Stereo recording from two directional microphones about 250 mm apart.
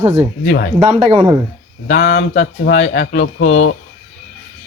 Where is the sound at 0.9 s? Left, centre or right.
Right.